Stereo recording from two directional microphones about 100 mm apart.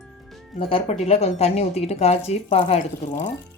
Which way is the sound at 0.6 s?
65° left (ahead or behind).